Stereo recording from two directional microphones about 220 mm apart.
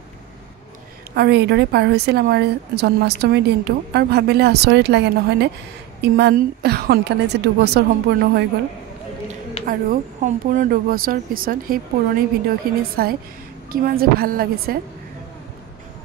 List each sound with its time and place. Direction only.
1.1 s a woman's voice: 50° right (ahead or behind)
9.7 s a woman's voice: 35° right (ahead or behind)